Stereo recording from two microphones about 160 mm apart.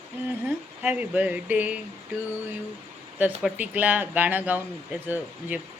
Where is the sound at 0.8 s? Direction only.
10° right (ahead or behind).